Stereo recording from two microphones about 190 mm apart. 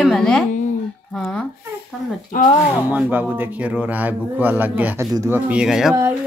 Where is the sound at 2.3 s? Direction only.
45° left (ahead or behind).